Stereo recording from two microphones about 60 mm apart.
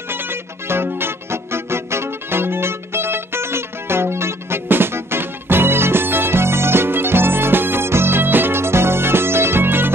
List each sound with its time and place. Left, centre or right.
0.1 s music: right